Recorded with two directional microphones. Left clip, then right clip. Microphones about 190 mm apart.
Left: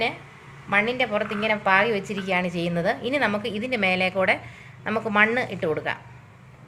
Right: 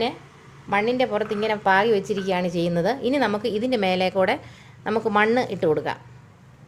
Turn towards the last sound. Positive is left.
turn(degrees=-50)  # may be behind; listen again after turning